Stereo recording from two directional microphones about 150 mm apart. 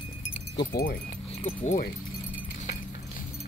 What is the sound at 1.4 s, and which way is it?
Speech, 55° left (ahead or behind).